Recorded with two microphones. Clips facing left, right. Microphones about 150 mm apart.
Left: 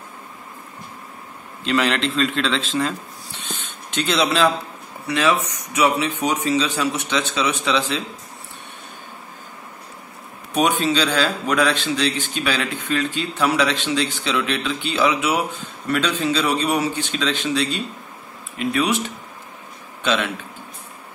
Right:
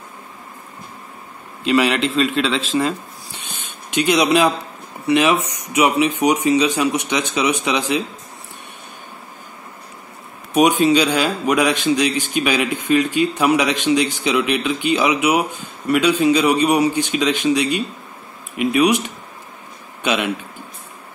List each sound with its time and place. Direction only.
1.6 s a man's voice: 5° right (ahead or behind)
3.4 s a sound: 15° right (ahead or behind)
5.0 s a man's voice: 20° right (ahead or behind)
10.5 s a man's voice: 15° right (ahead or behind)